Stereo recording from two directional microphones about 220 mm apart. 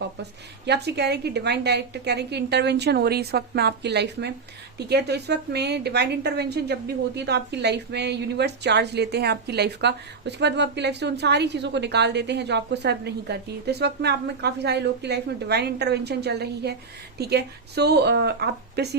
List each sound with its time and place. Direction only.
0.2 s a woman's voice: 50° right (ahead or behind)